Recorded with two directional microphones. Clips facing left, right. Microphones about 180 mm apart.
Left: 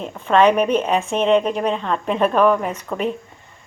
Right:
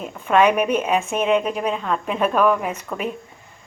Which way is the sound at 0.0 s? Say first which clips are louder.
Left 2 dB; 10° right (ahead or behind).